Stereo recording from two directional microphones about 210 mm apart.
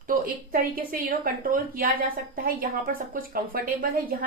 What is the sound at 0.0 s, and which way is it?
A woman's voice, 40° right (ahead or behind).